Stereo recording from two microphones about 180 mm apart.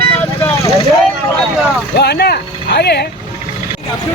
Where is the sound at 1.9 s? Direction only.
65° left (ahead or behind).